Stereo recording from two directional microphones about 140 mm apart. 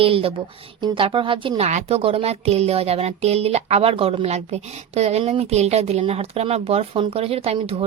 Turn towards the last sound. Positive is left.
turn(degrees=-45)  # may be behind; listen again after turning